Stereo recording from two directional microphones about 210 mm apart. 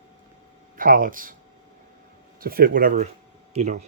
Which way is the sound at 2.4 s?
45° right (ahead or behind).